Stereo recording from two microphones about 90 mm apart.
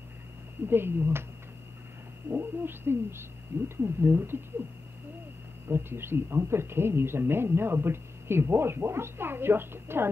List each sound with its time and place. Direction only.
0.7 s speech: 25° right (ahead or behind)
2.3 s speech: 25° right (ahead or behind)
5.7 s speech: 25° right (ahead or behind)